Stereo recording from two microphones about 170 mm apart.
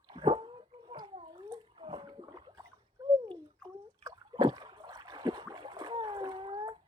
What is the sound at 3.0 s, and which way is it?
Bathtub, 20° right (ahead or behind).